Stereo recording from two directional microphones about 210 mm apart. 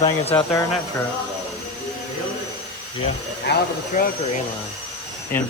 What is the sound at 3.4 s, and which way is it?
Speech, 45° left (ahead or behind).